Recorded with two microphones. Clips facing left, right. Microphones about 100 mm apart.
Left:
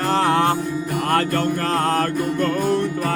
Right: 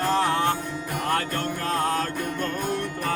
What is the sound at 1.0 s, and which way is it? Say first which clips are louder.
Music: left 6 dB; 60° left (ahead or behind).